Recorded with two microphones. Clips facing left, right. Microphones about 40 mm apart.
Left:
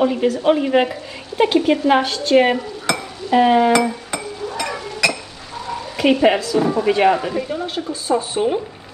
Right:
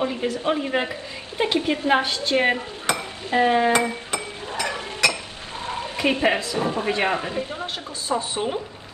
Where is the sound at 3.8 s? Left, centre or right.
Right.